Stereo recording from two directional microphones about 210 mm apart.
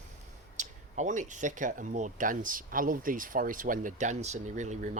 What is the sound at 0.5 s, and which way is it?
Speech, 35° right (ahead or behind).